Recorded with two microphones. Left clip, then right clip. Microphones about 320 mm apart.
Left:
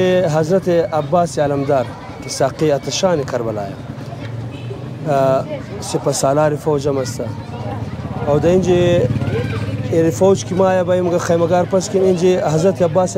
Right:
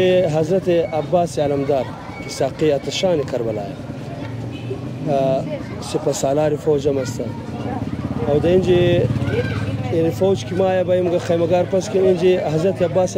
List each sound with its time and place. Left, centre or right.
0.0 s speech: left
5.1 s speech: left
8.3 s speech: left